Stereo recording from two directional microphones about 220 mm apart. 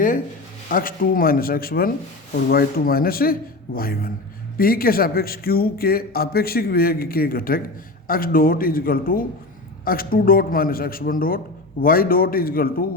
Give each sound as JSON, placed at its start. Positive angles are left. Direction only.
{"t": 0.7, "sound": "a man's voice", "side_deg": 40}